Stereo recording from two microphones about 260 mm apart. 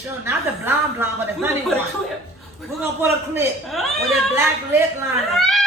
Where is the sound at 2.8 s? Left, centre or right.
Centre.